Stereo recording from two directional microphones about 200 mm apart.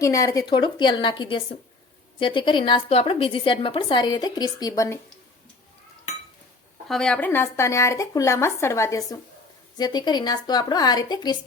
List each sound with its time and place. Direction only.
0.0 s a woman's voice: 15° left (ahead or behind)
6.8 s a woman's voice: 5° left (ahead or behind); by 11.3 s 20° left (ahead or behind)